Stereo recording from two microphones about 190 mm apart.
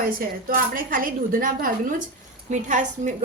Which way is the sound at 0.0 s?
50° right (ahead or behind).